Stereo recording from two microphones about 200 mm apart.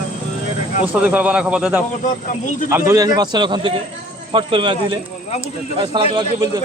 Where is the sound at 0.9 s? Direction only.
5° right (ahead or behind); by 6.2 s 25° right (ahead or behind).